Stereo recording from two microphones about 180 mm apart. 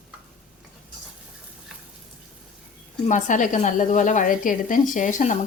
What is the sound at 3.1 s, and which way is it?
A woman's voice, 45° left (ahead or behind).